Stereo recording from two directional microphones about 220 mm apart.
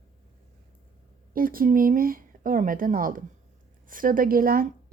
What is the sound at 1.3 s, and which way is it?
Speech, 40° right (ahead or behind).